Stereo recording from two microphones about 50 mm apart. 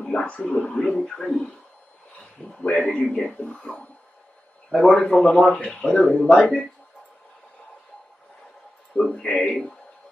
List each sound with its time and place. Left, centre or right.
0.0 s speech: centre
9.1 s speech: left
9.5 s speech: centre